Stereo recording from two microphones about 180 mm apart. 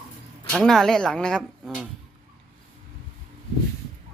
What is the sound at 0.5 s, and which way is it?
Speech, 5° left (ahead or behind).